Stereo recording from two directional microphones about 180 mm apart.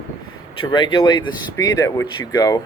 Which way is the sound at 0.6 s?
25° left (ahead or behind).